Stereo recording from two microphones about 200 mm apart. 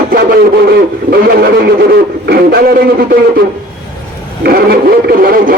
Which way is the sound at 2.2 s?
55° right (ahead or behind).